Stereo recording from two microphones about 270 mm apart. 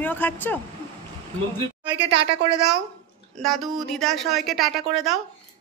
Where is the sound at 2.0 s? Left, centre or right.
Right.